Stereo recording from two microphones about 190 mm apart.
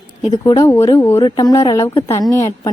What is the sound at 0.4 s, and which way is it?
A woman's voice, 15° left (ahead or behind).